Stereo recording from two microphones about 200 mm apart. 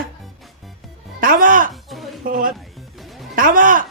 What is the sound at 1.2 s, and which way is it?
Speech, 45° right (ahead or behind).